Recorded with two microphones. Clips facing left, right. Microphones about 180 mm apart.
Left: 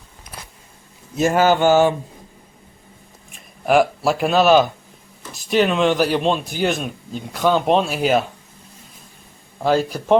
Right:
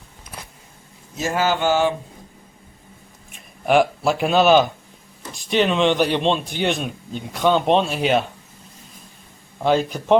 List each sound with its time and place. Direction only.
1.2 s a sound: 50° left (ahead or behind)
3.3 s speech: centre (ahead or behind)
9.6 s speech: 5° left (ahead or behind)